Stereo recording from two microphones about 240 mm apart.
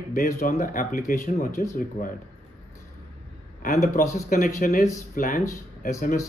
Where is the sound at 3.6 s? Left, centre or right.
Left.